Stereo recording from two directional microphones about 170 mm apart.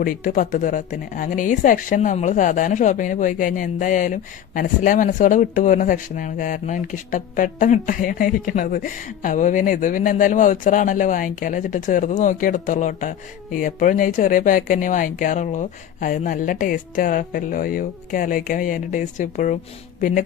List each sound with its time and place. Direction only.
0.0 s speech: 55° left (ahead or behind)